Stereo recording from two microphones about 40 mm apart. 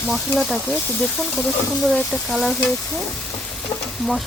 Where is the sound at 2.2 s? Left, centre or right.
Centre.